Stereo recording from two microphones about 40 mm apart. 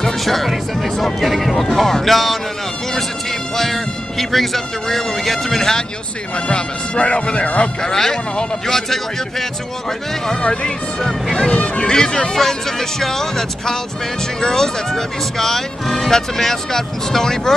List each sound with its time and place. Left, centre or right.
0.0 s speech: centre
6.3 s speech: left
7.8 s speech: centre
10.2 s speech: left
11.6 s a sound: left
11.9 s speech: centre